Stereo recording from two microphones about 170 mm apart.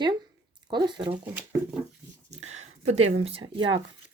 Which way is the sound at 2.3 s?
40° right (ahead or behind).